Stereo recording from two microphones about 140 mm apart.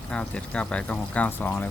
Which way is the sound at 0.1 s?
5° left (ahead or behind).